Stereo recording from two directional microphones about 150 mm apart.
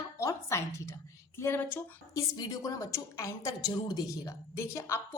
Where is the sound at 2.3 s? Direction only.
25° left (ahead or behind).